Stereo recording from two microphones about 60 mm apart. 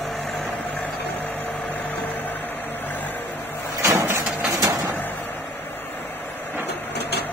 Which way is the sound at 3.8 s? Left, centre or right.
Right.